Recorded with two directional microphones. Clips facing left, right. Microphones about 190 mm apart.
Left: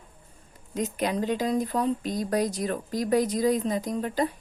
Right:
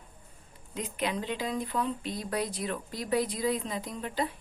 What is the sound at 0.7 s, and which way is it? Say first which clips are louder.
Speech: left 5 dB; 40° left (ahead or behind).